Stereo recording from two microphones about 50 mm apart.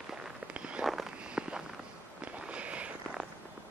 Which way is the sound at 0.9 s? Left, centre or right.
Centre.